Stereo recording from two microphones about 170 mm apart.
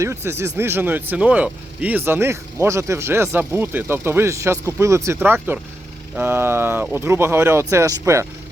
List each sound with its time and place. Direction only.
0.0 s speech: 15° right (ahead or behind)